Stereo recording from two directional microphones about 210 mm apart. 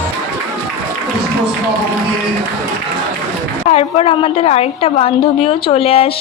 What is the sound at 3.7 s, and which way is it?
A woman's voice, 30° left (ahead or behind).